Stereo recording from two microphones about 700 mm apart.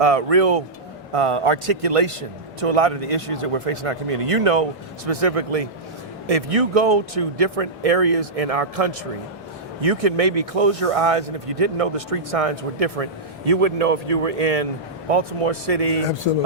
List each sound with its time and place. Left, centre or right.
0.0 s speech: right